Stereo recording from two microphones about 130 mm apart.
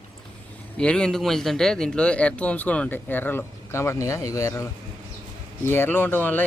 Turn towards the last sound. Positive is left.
turn(degrees=15)  # may be behind; listen again after turning